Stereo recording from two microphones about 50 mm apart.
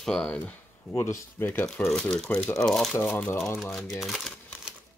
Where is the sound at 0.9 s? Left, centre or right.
Left.